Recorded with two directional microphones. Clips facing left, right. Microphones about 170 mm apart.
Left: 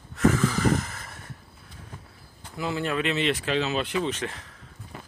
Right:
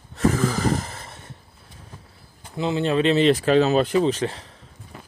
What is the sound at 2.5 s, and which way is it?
Speech, 25° right (ahead or behind).